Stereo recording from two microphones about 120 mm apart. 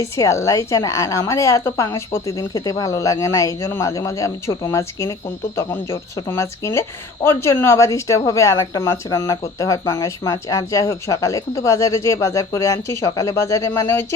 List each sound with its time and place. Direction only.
0.0 s speech: 25° left (ahead or behind)